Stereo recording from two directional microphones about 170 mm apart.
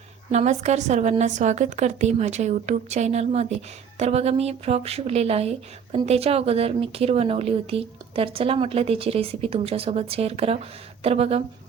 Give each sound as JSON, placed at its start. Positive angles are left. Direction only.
{"t": 0.3, "sound": "speech", "side_deg": -40}